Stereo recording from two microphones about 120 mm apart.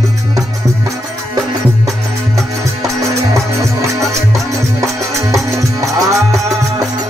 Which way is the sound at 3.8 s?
25° right (ahead or behind).